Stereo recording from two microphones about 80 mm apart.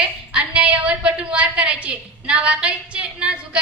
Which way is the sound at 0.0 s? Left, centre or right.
Centre.